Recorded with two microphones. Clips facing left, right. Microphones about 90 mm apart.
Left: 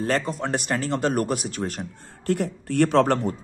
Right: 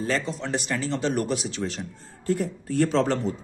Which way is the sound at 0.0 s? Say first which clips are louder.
Left 3 dB; 50° left (ahead or behind).